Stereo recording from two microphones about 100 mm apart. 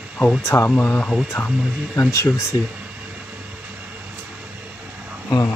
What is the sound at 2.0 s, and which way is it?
Speech, 30° left (ahead or behind).